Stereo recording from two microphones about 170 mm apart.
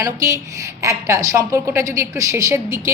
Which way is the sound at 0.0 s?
20° right (ahead or behind).